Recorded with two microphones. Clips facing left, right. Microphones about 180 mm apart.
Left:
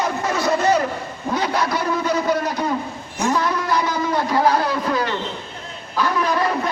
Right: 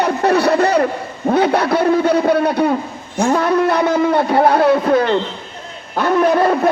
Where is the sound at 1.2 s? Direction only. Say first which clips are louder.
Right 8 dB; 60° right (ahead or behind).